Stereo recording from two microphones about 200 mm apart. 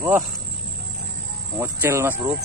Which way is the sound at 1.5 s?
10° right (ahead or behind).